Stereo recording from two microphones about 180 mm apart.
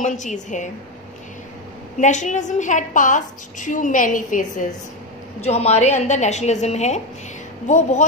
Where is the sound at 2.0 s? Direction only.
45° left (ahead or behind).